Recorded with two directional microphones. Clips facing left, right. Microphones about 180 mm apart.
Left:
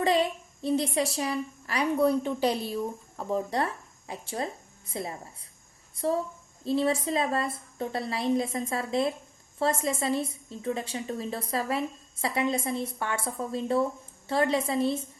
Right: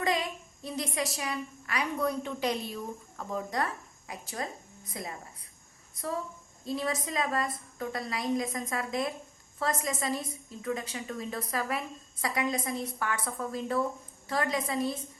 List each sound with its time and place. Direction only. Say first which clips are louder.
0.0 s a woman's voice: left 6 dB; 30° left (ahead or behind)